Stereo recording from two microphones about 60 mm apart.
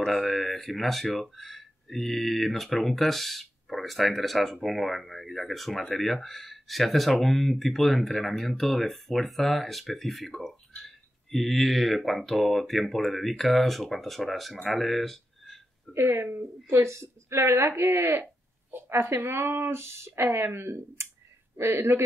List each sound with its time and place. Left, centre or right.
0.0 s speech: centre
15.9 s speech: right